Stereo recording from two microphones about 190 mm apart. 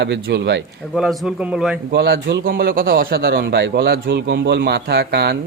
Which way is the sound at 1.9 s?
60° right (ahead or behind).